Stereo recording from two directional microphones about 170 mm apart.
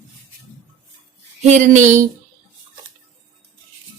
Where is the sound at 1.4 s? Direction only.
45° right (ahead or behind).